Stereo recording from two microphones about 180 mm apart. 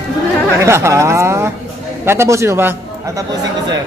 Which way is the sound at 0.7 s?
15° right (ahead or behind).